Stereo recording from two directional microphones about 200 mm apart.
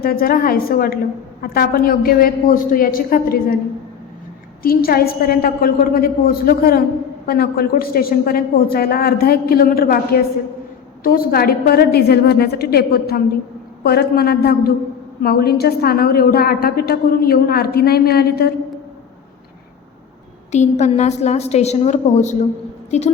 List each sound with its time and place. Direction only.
0.0 s a woman's voice: 45° left (ahead or behind)
4.6 s a woman's voice: 50° left (ahead or behind)
20.5 s a woman's voice: 35° left (ahead or behind)